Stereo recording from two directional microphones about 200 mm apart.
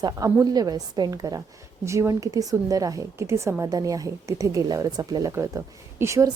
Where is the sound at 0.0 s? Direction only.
15° right (ahead or behind).